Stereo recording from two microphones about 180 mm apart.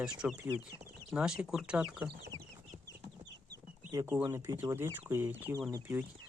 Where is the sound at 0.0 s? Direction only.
5° right (ahead or behind).